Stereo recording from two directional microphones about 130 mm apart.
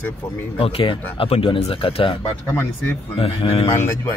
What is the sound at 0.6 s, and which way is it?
Speech, 40° left (ahead or behind).